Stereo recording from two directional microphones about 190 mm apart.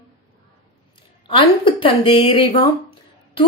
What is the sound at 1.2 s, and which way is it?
A woman's voice, 25° left (ahead or behind).